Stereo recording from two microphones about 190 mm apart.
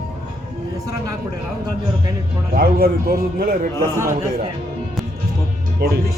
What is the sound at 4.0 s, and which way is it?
Speech, 15° right (ahead or behind).